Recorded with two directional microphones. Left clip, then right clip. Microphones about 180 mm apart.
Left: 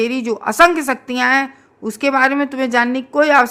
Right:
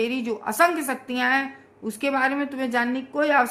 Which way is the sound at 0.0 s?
40° left (ahead or behind).